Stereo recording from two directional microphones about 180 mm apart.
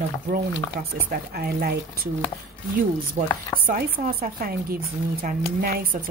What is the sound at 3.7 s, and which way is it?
Speech, 50° right (ahead or behind).